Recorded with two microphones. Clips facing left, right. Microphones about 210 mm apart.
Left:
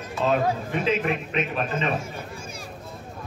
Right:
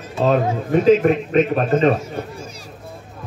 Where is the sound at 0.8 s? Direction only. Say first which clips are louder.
Right 12 dB; 45° right (ahead or behind).